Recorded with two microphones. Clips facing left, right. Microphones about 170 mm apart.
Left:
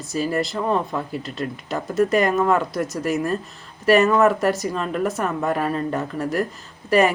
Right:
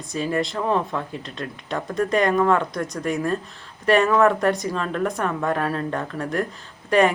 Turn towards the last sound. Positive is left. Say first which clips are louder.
# left 1 dB
turn(degrees=5)  # may be behind; listen again after turning